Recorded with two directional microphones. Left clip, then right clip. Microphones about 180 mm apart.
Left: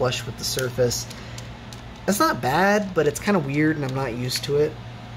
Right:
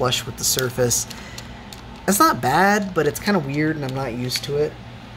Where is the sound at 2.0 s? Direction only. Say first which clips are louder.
Right 4 dB; 20° right (ahead or behind); by 4.3 s centre (ahead or behind).